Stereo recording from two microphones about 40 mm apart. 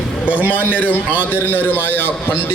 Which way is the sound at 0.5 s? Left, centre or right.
Left.